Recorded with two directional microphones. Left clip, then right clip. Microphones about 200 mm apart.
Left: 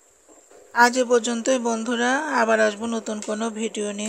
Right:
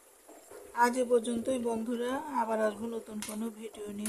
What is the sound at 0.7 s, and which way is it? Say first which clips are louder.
Speech: left 10 dB; 30° left (ahead or behind).